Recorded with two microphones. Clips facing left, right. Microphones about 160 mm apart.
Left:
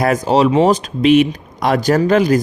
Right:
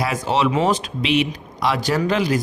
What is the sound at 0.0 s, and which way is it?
A man's voice, 45° left (ahead or behind).